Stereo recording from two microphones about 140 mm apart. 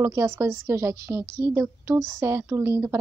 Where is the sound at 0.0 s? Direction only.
20° right (ahead or behind).